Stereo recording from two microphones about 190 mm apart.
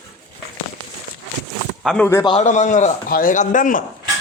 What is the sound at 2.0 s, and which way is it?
Speech, 15° left (ahead or behind).